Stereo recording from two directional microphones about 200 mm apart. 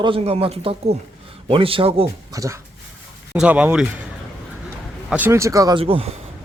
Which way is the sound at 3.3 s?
5° right (ahead or behind).